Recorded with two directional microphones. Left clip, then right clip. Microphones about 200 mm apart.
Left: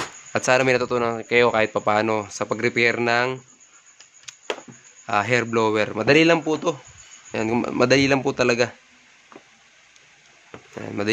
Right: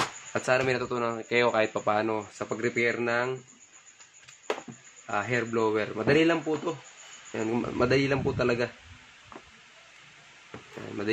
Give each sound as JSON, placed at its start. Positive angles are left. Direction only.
{"t": 0.3, "sound": "speech", "side_deg": 45}
{"t": 5.0, "sound": "a man's voice", "side_deg": 55}